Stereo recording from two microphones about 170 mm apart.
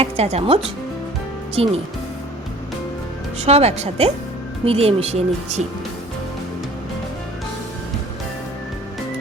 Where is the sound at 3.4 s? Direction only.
40° right (ahead or behind).